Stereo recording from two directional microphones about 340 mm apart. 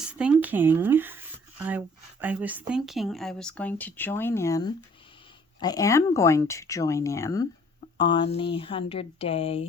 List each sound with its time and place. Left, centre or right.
0.1 s speech: centre